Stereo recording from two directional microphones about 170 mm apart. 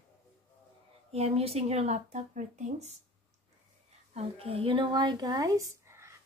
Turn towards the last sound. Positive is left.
turn(degrees=-15)  # may be behind; listen again after turning